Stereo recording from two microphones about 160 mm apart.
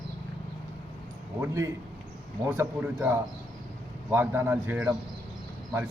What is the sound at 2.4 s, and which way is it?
A man's voice, 15° right (ahead or behind).